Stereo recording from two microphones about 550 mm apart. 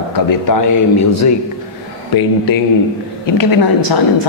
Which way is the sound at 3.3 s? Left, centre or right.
Left.